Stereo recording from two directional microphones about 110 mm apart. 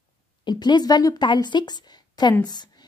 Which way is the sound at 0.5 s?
40° left (ahead or behind).